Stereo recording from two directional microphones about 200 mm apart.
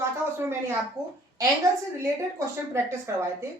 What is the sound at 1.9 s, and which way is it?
A woman's voice, 15° right (ahead or behind).